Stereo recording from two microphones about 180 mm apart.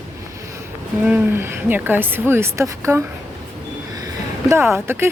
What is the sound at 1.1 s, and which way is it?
Speech, 10° right (ahead or behind).